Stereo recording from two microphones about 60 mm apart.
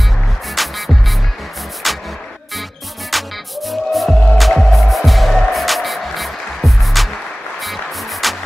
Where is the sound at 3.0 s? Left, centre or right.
Centre.